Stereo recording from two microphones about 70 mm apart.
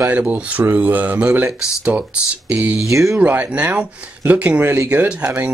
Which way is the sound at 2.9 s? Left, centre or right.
Right.